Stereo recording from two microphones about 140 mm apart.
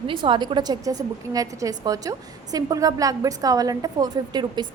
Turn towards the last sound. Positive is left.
turn(degrees=-30)  # may be behind; listen again after turning